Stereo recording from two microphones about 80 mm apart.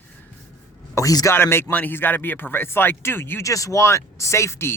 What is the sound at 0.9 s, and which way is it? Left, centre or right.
Speech, left.